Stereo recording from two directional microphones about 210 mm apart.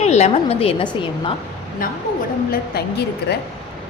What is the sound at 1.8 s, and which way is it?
A woman's voice, 40° left (ahead or behind).